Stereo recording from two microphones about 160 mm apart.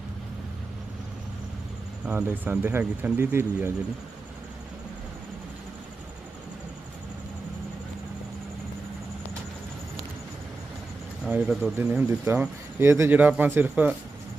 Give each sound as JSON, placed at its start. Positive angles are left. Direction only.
{"t": 2.0, "sound": "speech", "side_deg": -10}
{"t": 11.3, "sound": "speech", "side_deg": -10}